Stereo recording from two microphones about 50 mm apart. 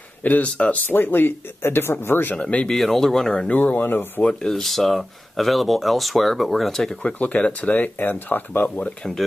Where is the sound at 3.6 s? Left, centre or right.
Left.